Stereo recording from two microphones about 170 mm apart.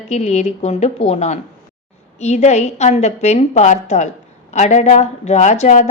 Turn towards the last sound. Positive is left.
turn(degrees=45)  # may be behind; listen again after turning